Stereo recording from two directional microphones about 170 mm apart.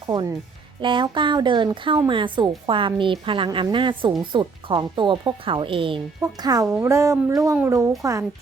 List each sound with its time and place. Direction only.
0.1 s a woman's voice: 25° right (ahead or behind)